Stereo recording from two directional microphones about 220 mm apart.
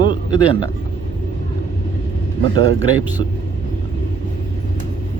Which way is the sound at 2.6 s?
65° right (ahead or behind).